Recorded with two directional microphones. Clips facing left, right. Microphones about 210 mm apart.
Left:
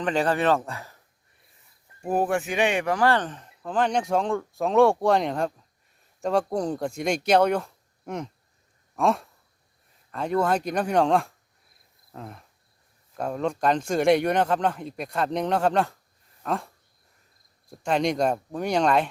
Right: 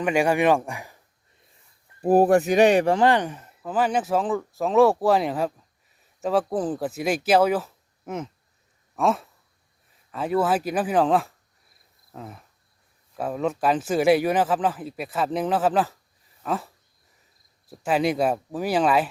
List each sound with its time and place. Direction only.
0.0 s speech: 10° right (ahead or behind)
2.0 s speech: 35° right (ahead or behind)
2.9 s a man's voice: 20° right (ahead or behind)